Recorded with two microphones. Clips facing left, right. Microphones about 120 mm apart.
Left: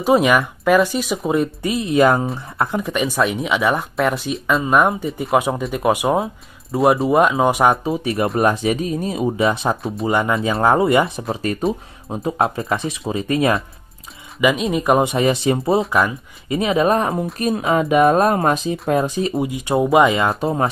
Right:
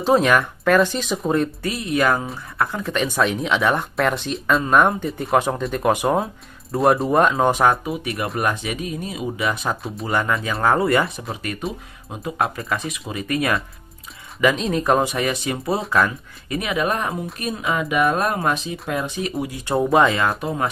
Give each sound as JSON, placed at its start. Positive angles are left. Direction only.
{"t": 0.0, "sound": "speech", "side_deg": 10}
{"t": 7.8, "sound": "speech", "side_deg": 30}
{"t": 9.4, "sound": "speech", "side_deg": 25}
{"t": 12.1, "sound": "speech", "side_deg": 30}
{"t": 14.4, "sound": "speech", "side_deg": 5}
{"t": 15.0, "sound": "speech", "side_deg": 25}
{"t": 17.4, "sound": "speech", "side_deg": 45}
{"t": 19.3, "sound": "speech", "side_deg": 20}
{"t": 20.2, "sound": "speech", "side_deg": 30}